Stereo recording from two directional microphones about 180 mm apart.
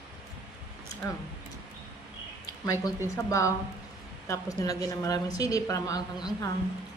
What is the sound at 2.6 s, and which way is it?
A man's voice, 20° left (ahead or behind).